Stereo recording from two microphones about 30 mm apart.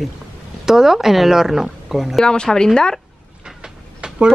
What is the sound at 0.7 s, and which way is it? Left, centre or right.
Speech, centre.